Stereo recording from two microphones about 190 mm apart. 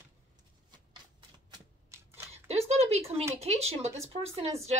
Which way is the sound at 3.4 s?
35° right (ahead or behind).